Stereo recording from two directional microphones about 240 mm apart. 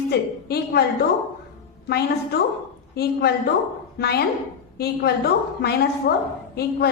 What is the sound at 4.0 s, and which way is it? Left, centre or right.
A woman's voice, left.